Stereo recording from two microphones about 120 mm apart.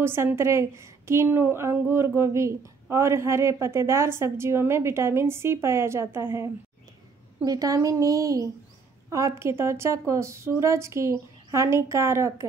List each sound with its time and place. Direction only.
0.0 s a woman's voice: 20° right (ahead or behind)
7.4 s a woman's voice: 30° right (ahead or behind)